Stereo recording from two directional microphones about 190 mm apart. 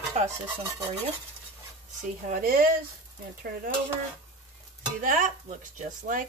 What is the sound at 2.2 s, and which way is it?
Speech, 50° right (ahead or behind).